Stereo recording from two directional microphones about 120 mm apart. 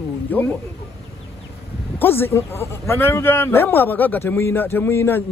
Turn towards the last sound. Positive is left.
turn(degrees=20)  # may be behind; listen again after turning